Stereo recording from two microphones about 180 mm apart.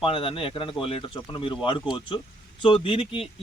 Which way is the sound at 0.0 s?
30° left (ahead or behind).